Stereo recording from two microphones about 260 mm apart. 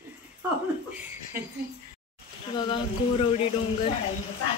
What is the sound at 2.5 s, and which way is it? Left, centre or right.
Speech, centre.